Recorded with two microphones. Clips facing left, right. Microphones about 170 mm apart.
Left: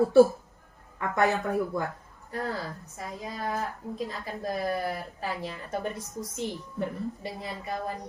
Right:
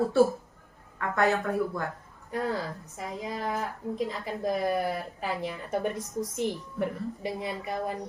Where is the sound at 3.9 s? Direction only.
20° right (ahead or behind).